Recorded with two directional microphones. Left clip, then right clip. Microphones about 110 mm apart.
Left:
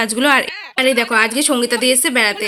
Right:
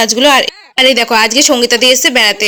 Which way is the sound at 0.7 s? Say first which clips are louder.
Right 6 dB; 40° right (ahead or behind).